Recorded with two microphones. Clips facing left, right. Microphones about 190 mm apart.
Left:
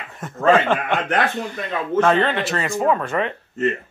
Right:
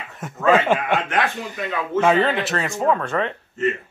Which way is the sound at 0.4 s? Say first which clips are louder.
Left 1 dB; 55° left (ahead or behind).